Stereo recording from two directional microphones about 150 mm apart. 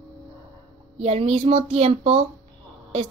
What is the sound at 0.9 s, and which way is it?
Speech, 45° right (ahead or behind).